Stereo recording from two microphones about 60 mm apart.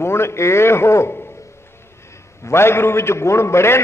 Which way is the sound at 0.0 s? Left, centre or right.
Left.